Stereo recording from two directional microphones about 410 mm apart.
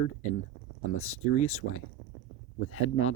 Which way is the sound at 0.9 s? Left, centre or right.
Left.